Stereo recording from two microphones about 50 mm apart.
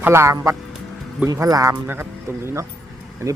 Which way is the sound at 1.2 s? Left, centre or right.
Right.